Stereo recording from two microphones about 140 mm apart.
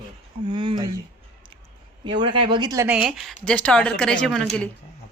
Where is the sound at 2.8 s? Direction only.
10° right (ahead or behind).